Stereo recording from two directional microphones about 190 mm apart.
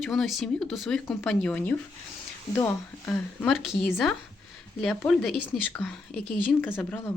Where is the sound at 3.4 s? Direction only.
Centre (ahead or behind).